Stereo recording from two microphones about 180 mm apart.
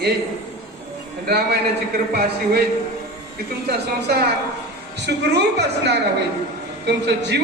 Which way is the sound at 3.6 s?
65° right (ahead or behind).